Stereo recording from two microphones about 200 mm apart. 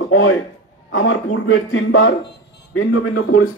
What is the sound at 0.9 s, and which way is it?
A man's voice, 80° left.